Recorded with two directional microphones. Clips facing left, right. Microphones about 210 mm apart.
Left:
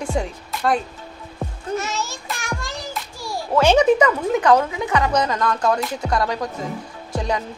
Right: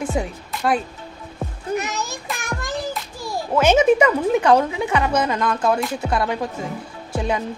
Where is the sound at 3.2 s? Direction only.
15° right (ahead or behind).